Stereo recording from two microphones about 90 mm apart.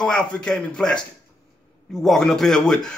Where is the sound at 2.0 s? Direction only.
5° left (ahead or behind).